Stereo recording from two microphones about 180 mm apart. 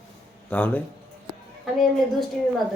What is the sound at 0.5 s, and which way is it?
Speech, 5° left (ahead or behind).